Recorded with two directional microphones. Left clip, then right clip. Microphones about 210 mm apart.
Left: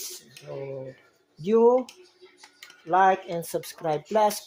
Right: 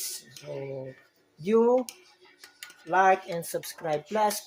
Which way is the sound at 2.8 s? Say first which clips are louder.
Left 2 dB; 15° left (ahead or behind).